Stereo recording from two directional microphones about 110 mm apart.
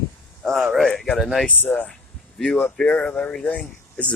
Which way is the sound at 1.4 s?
15° left (ahead or behind).